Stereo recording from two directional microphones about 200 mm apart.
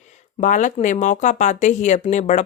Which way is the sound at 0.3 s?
40° left (ahead or behind).